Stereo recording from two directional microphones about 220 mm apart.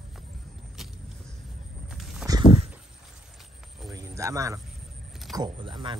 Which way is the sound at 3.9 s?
15° right (ahead or behind).